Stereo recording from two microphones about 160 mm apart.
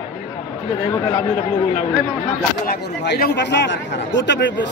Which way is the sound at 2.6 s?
80° left.